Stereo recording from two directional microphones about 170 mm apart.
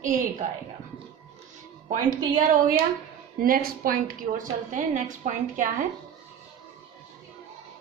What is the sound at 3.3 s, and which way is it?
A woman's voice, 60° right (ahead or behind).